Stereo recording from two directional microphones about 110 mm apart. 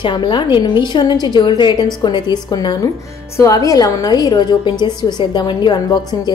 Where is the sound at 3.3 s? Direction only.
30° left (ahead or behind).